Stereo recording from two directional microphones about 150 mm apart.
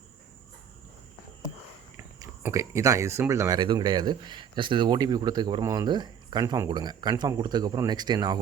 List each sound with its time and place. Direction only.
2.0 s a sound: 20° right (ahead or behind)
2.4 s speech: 20° right (ahead or behind)
3.6 s speech: 30° right (ahead or behind)
6.4 s speech: 15° right (ahead or behind)
6.7 s speech: 30° right (ahead or behind)